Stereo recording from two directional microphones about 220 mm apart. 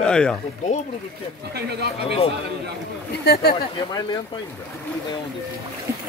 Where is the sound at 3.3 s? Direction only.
45° left (ahead or behind).